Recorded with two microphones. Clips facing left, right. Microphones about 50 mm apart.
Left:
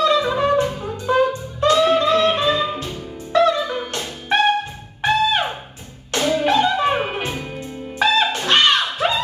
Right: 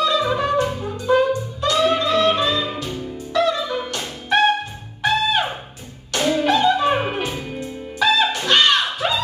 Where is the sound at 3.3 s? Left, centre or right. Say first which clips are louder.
Left 3 dB; left.